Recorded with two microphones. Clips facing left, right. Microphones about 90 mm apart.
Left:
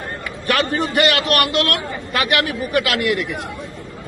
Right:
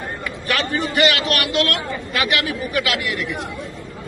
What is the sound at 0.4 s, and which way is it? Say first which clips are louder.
A man's voice: left 3 dB; 50° left (ahead or behind).